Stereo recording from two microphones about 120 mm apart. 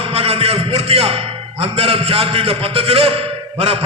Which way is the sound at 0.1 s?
55° right (ahead or behind).